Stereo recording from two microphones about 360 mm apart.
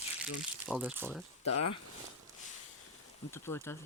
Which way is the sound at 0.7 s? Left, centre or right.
Centre.